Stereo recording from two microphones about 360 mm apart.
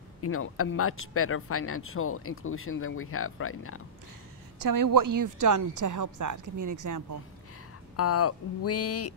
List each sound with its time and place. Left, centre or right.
0.2 s speech: left
4.6 s a woman's voice: right
7.9 s speech: left